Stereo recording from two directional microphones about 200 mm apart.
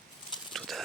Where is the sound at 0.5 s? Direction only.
Centre (ahead or behind).